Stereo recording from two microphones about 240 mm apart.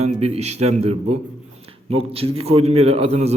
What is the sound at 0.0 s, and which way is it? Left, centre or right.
A man's voice, right.